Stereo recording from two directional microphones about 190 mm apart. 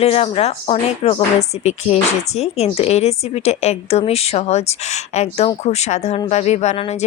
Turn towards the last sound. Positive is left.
turn(degrees=35)  # may be behind; listen again after turning